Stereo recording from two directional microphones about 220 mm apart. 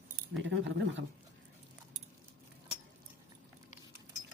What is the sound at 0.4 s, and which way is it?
Speech, 55° right (ahead or behind).